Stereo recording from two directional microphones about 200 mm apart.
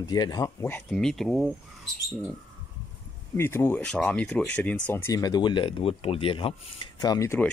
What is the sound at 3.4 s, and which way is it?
Speech, 10° left (ahead or behind).